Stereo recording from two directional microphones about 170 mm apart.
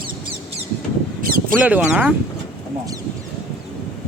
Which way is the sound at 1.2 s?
55° right (ahead or behind).